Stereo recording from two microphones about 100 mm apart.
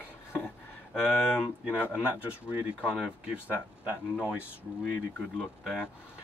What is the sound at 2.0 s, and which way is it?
Speech, 15° right (ahead or behind).